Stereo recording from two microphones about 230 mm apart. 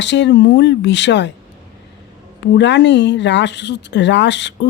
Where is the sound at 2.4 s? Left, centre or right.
Left.